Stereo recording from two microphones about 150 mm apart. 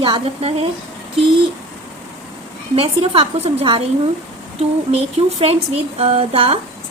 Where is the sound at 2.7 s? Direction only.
40° right (ahead or behind).